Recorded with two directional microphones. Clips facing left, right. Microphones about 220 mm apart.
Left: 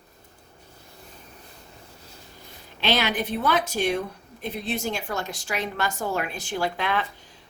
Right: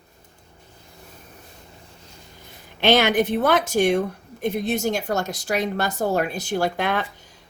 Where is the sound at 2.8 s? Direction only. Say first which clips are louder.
Right 7 dB; 50° right (ahead or behind).